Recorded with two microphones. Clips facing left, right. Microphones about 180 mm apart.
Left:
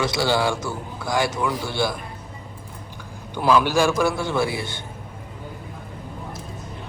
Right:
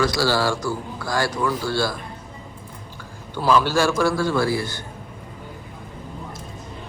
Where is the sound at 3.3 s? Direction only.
15° left (ahead or behind).